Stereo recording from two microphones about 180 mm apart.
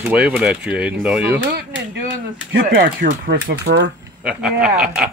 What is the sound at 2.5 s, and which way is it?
Speech, 90° right.